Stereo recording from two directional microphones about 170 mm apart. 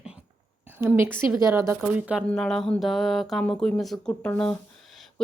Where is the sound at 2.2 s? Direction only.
5° left (ahead or behind).